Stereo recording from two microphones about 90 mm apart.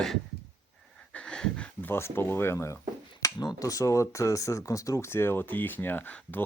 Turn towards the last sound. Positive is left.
turn(degrees=20)  # may be behind; listen again after turning